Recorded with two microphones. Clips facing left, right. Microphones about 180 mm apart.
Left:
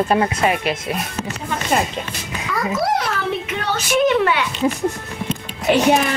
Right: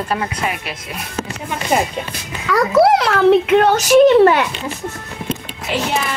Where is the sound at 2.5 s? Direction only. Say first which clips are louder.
Right 8 dB; 65° right (ahead or behind).